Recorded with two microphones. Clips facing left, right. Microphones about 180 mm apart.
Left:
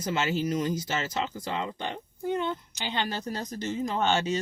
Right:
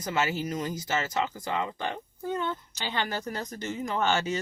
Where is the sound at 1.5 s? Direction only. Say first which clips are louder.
Right 2 dB; 25° left (ahead or behind).